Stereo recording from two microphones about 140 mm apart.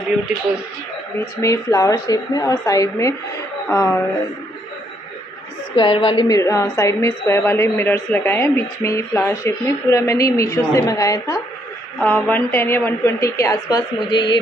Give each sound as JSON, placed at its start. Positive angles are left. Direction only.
{"t": 1.4, "sound": "a woman's voice", "side_deg": 20}
{"t": 5.8, "sound": "a woman's voice", "side_deg": 35}
{"t": 6.2, "sound": "a woman's voice", "side_deg": 25}
{"t": 12.0, "sound": "a woman's voice", "side_deg": 10}